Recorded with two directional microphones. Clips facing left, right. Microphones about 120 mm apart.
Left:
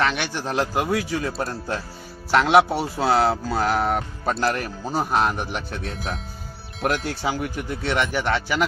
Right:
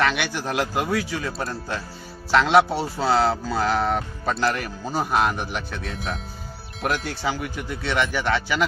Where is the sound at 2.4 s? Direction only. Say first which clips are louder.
Left 2 dB; 10° left (ahead or behind).